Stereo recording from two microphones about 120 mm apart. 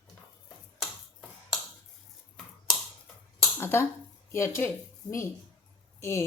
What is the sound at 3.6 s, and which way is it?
A woman's voice, 20° left (ahead or behind).